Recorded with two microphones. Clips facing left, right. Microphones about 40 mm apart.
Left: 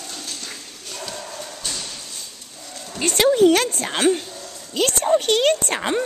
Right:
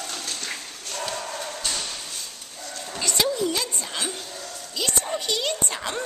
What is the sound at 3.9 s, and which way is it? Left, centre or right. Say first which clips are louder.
A woman's voice: left 11 dB; left.